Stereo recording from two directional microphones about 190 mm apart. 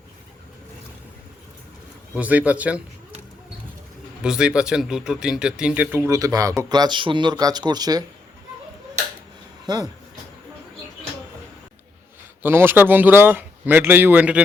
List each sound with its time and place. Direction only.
2.1 s speech: 10° right (ahead or behind)
4.2 s speech: 5° right (ahead or behind); by 8.0 s 20° right (ahead or behind)
9.7 s speech: 20° right (ahead or behind)
12.4 s speech: 10° right (ahead or behind)